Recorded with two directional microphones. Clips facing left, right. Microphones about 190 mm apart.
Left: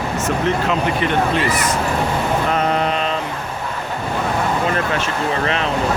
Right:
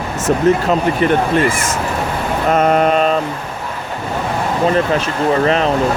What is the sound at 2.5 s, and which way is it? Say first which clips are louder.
Mantra: right 6 dB; 50° right (ahead or behind).